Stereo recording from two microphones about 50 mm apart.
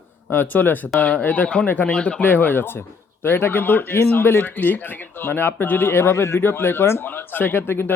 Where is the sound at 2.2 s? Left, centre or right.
Left.